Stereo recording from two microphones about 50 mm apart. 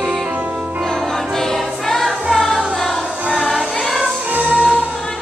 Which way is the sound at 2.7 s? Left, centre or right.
Centre.